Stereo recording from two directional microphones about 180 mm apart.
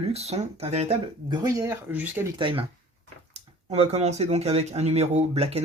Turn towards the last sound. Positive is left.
turn(degrees=-35)  # may be behind; listen again after turning